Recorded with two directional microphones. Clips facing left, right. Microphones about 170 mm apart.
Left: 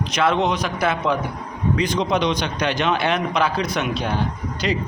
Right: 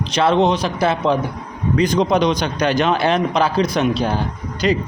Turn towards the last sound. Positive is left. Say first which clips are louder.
# right 5 dB
turn(degrees=-40)  # may be behind; listen again after turning